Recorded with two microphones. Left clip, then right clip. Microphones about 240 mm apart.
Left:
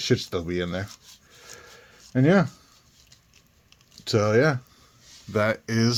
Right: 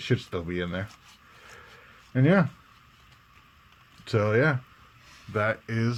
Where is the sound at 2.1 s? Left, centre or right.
Left.